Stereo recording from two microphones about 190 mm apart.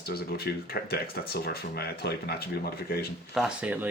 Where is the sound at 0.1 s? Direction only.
55° left (ahead or behind).